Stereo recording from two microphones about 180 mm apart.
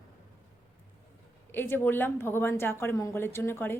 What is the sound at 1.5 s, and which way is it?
A woman's voice, 10° left (ahead or behind).